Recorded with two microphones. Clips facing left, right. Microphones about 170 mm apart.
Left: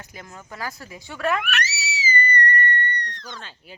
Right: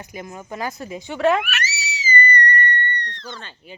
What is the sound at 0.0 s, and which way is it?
Speech, 15° right (ahead or behind).